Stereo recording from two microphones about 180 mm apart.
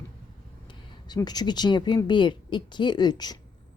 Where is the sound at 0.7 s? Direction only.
25° left (ahead or behind).